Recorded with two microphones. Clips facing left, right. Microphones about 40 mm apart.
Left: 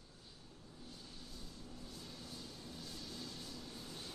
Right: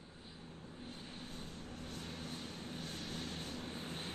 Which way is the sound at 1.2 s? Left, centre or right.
Right.